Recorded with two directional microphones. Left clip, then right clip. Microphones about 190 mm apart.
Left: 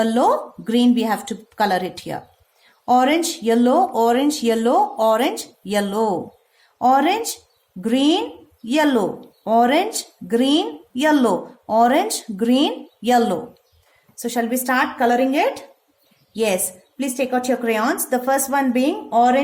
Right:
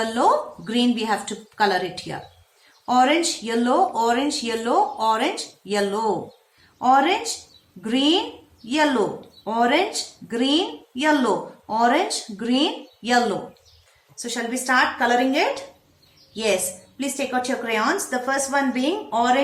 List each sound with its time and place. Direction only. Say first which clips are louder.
0.0 s speech: left 2 dB; 45° left (ahead or behind)
14.2 s a woman's voice: left 5 dB; 55° left (ahead or behind)